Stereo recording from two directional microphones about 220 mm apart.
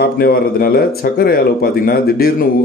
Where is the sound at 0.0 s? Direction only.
45° left (ahead or behind).